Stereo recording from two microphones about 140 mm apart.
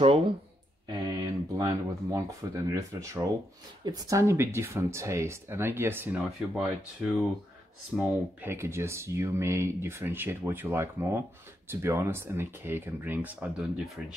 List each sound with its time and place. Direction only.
0.8 s speech: 25° right (ahead or behind)
6.5 s speech: 5° right (ahead or behind)
8.0 s speech: 15° right (ahead or behind)